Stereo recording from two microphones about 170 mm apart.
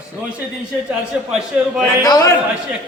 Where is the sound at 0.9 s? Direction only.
5° right (ahead or behind).